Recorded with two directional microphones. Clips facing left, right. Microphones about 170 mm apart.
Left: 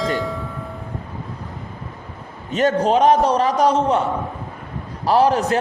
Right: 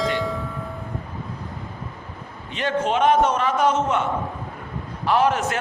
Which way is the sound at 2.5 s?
40° left (ahead or behind).